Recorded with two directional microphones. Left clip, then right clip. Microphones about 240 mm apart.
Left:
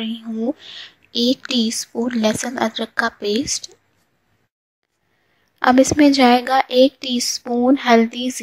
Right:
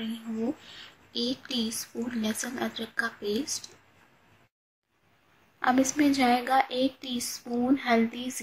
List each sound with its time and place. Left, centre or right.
0.0 s speech: left
5.6 s speech: left